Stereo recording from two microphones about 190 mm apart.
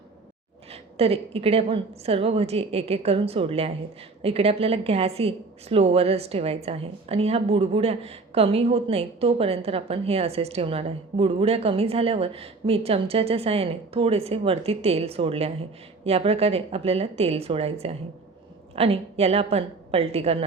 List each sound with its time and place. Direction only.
0.7 s a woman's voice: 30° right (ahead or behind)